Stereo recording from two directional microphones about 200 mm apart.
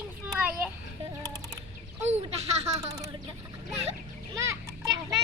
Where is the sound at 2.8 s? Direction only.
15° right (ahead or behind).